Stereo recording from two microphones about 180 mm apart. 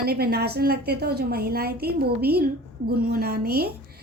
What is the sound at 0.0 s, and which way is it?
A woman's voice, 60° right (ahead or behind).